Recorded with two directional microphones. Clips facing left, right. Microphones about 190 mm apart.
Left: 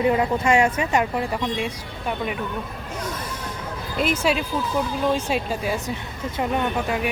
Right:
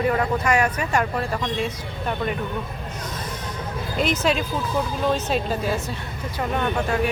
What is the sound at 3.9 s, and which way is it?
Speech, 10° left (ahead or behind).